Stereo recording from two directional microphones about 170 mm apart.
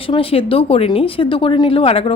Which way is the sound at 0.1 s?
35° left (ahead or behind).